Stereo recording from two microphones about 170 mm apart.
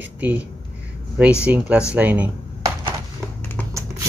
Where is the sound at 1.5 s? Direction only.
10° right (ahead or behind).